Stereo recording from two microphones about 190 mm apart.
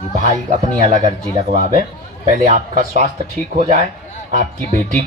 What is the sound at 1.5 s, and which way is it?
Speech, 40° right (ahead or behind).